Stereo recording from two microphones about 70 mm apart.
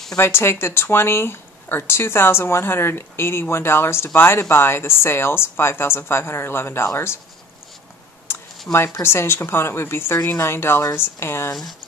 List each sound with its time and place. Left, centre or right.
0.2 s speech: left
8.7 s speech: left